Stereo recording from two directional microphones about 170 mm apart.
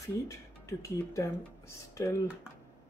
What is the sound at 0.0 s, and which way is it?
Speech, 20° left (ahead or behind).